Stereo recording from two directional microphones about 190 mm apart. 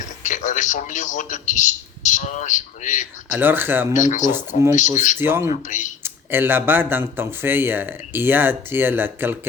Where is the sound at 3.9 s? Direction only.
40° left (ahead or behind).